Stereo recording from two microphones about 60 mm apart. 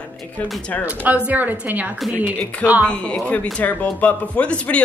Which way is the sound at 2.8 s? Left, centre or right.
Centre.